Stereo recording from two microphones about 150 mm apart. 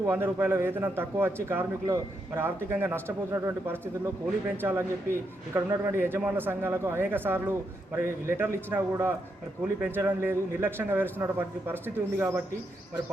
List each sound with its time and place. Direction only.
0.0 s a man's voice: 15° right (ahead or behind)